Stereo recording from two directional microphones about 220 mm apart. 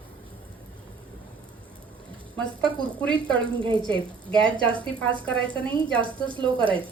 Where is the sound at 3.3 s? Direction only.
20° right (ahead or behind).